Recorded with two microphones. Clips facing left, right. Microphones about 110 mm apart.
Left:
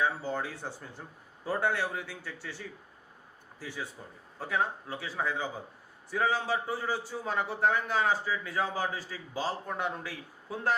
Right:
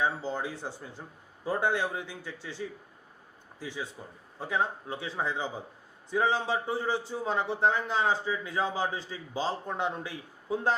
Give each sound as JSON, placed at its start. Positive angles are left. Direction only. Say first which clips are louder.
{"t": 0.0, "sound": "speech", "louder": "right 1 dB", "side_deg": -20}